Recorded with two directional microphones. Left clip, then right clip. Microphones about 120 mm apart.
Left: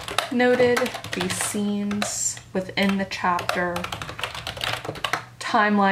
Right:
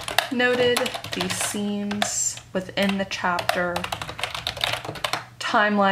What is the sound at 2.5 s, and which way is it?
Speech, 40° right (ahead or behind).